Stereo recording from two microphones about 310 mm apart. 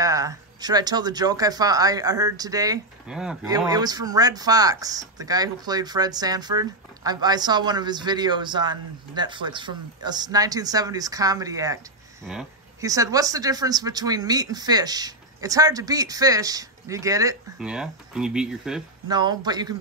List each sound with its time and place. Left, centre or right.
0.0 s speech: centre
19.0 s speech: centre